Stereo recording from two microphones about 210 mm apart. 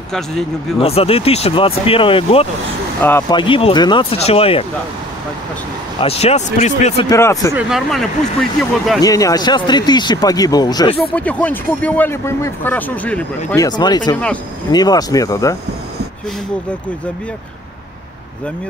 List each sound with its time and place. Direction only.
0.7 s speech: 30° left (ahead or behind)
3.0 s speech: 10° left (ahead or behind)
3.3 s speech: 25° left (ahead or behind)
5.9 s speech: 30° left (ahead or behind)
7.1 s speech: 15° left (ahead or behind)
7.5 s speech: centre (ahead or behind)
9.0 s speech: 15° left (ahead or behind)
11.1 s speech: 5° left (ahead or behind)
13.7 s speech: 20° left (ahead or behind)
14.1 s speech: 5° left (ahead or behind)
14.7 s speech: 20° left (ahead or behind)